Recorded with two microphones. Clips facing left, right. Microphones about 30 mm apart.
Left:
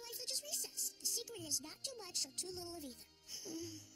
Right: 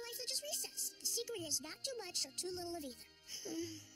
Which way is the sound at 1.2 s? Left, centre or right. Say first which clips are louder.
Right 7 dB; right.